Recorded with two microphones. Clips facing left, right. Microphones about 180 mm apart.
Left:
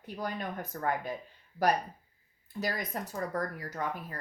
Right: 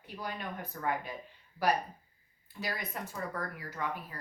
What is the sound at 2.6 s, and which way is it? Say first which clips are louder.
Speech: left 3 dB; 40° left (ahead or behind).